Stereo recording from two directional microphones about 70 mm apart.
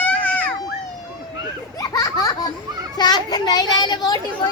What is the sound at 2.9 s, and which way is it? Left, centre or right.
Children playing, left.